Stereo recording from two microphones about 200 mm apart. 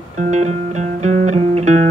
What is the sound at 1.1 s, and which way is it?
Music, 35° right (ahead or behind).